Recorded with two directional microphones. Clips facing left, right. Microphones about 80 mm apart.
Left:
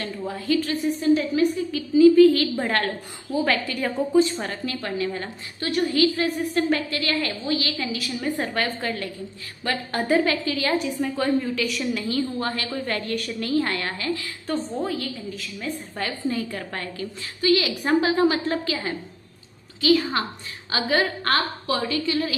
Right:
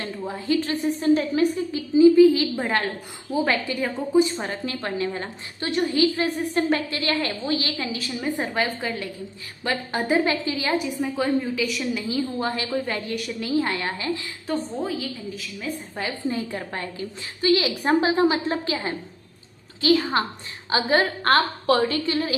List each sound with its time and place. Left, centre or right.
0.0 s a woman's voice: right
1.7 s a woman's voice: right
8.2 s a woman's voice: centre
11.6 s a woman's voice: centre; by 14.3 s right
14.4 s a woman's voice: centre
16.0 s a woman's voice: right